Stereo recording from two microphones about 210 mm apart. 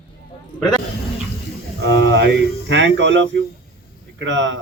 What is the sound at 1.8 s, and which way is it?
Speech, 60° right (ahead or behind).